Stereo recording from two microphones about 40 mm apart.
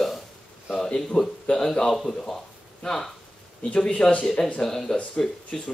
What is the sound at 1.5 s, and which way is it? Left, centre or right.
Speech, centre.